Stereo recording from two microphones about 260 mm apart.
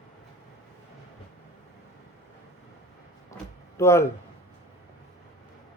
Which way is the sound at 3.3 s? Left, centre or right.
Centre.